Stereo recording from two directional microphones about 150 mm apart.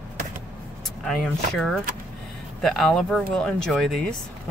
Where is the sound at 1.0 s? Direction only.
5° left (ahead or behind).